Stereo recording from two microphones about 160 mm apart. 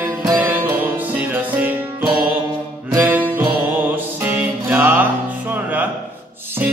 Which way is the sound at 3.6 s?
10° right (ahead or behind).